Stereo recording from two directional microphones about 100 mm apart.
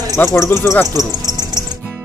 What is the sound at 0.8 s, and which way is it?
Music, 40° right (ahead or behind).